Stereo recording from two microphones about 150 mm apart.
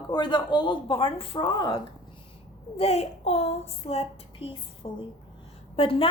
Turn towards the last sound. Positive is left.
turn(degrees=35)  # may be behind; listen again after turning